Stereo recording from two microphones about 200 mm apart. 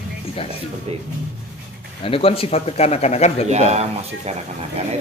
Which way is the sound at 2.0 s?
30° left (ahead or behind).